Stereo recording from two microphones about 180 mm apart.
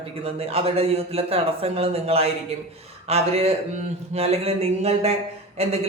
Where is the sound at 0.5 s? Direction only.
35° right (ahead or behind).